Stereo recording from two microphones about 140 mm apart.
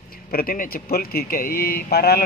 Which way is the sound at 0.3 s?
90° left.